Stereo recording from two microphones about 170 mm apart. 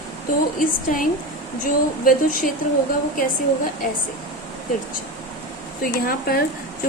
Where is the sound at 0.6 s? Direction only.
50° left (ahead or behind).